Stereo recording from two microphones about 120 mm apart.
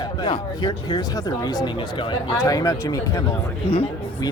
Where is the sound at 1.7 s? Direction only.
45° left (ahead or behind).